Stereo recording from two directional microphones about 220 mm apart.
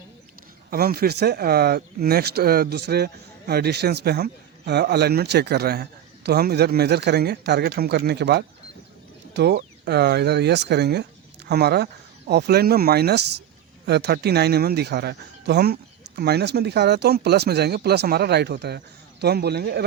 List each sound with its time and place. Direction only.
0.7 s speech: 45° right (ahead or behind)